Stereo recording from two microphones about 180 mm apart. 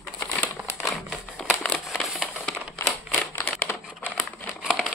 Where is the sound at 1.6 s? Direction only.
5° left (ahead or behind).